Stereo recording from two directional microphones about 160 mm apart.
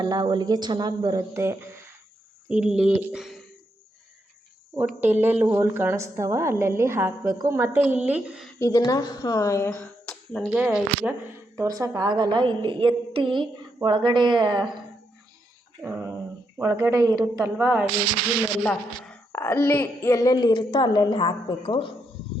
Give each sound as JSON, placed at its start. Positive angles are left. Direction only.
{"t": 0.0, "sound": "a woman's voice", "side_deg": -25}
{"t": 4.9, "sound": "a woman's voice", "side_deg": -10}
{"t": 8.5, "sound": "speech", "side_deg": 20}
{"t": 10.1, "sound": "a sound", "side_deg": 5}
{"t": 10.6, "sound": "speech", "side_deg": -5}
{"t": 11.5, "sound": "a woman's voice", "side_deg": -20}
{"t": 15.8, "sound": "a sound", "side_deg": -15}
{"t": 16.6, "sound": "a woman's voice", "side_deg": -20}
{"t": 17.6, "sound": "a woman's voice", "side_deg": -5}
{"t": 18.6, "sound": "speech", "side_deg": 10}